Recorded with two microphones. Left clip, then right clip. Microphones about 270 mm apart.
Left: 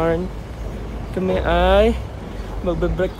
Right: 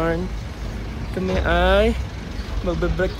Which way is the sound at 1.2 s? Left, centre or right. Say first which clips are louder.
Left 2 dB; centre.